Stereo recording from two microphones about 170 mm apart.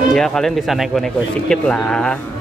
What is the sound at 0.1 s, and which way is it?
Speech, 5° left (ahead or behind).